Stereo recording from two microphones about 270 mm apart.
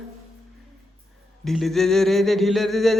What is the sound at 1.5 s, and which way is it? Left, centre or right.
A woman's voice, centre.